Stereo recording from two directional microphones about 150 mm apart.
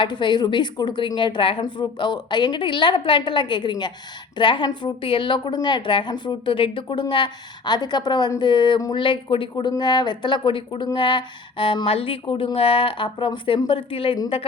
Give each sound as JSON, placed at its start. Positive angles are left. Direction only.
{"t": 0.0, "sound": "a woman's voice", "side_deg": 30}